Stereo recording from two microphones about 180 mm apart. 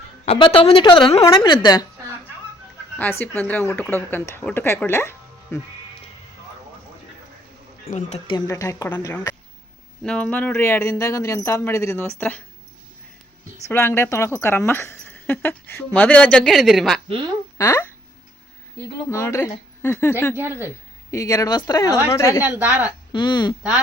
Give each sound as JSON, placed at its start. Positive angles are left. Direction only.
{"t": 0.3, "sound": "speech", "side_deg": 30}
{"t": 3.0, "sound": "speech", "side_deg": 10}
{"t": 7.9, "sound": "speech", "side_deg": 40}
{"t": 8.3, "sound": "speech", "side_deg": 20}
{"t": 10.0, "sound": "speech", "side_deg": 5}
{"t": 13.7, "sound": "speech", "side_deg": 15}
{"t": 17.6, "sound": "speech", "side_deg": 15}
{"t": 19.1, "sound": "speech", "side_deg": 15}
{"t": 20.3, "sound": "speech", "side_deg": -10}
{"t": 21.1, "sound": "speech", "side_deg": 20}
{"t": 22.4, "sound": "speech", "side_deg": -10}
{"t": 23.1, "sound": "speech", "side_deg": 25}